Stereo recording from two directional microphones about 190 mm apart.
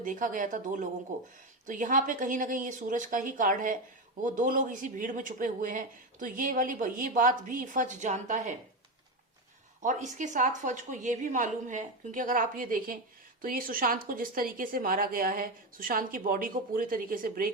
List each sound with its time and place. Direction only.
0.0 s speech: 45° right (ahead or behind)
9.8 s a woman's voice: 40° right (ahead or behind)